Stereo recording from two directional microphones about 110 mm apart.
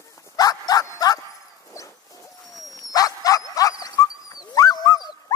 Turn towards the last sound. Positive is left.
turn(degrees=35)  # may be behind; listen again after turning